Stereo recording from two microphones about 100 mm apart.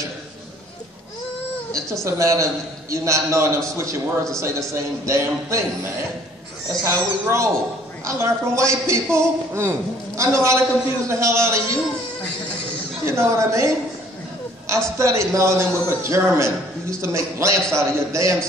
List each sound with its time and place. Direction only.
2.0 s a man's voice: 30° right (ahead or behind)
6.7 s a man's voice: 25° right (ahead or behind)
13.0 s a man's voice: 25° right (ahead or behind)
15.0 s a man's voice: 30° right (ahead or behind)